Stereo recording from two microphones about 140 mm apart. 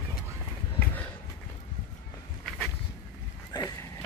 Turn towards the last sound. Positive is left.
turn(degrees=30)  # may be behind; listen again after turning